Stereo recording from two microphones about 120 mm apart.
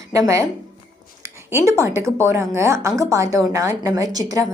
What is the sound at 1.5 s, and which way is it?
A woman's voice, 20° right (ahead or behind).